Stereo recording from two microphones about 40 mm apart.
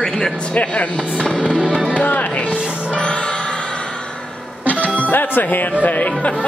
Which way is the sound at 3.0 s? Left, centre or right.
Left.